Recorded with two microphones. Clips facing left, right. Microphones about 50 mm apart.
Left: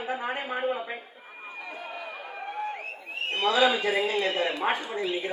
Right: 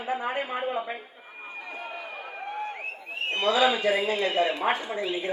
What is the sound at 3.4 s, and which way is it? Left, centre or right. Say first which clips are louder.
Speech: even; centre.